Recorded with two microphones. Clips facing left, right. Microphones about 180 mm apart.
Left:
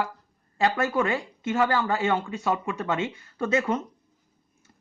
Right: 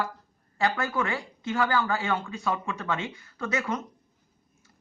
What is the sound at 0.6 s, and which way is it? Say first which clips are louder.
Speech: left 4 dB; 25° left (ahead or behind).